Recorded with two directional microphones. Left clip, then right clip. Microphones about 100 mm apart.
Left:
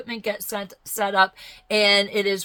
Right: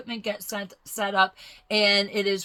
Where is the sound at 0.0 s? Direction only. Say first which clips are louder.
Left 3 dB; 35° left (ahead or behind).